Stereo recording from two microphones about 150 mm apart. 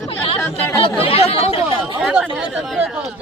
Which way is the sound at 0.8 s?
40° left (ahead or behind).